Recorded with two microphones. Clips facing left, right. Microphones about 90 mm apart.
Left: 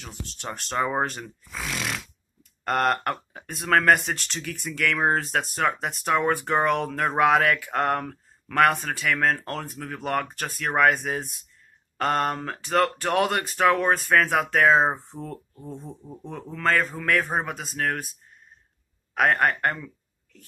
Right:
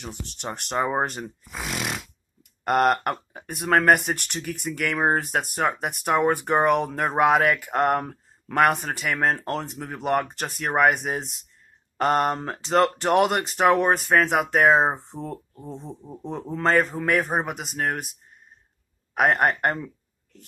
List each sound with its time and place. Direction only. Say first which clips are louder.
0.0 s speech: right 2 dB; 15° right (ahead or behind)
19.1 s speech: right 1 dB; 20° right (ahead or behind)